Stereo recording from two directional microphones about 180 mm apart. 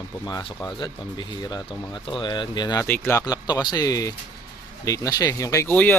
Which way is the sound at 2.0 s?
25° left (ahead or behind).